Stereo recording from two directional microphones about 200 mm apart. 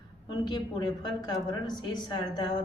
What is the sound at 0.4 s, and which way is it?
Speech, 20° left (ahead or behind).